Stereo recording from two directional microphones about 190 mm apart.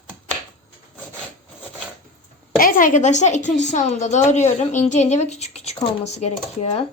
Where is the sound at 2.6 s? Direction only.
45° left (ahead or behind).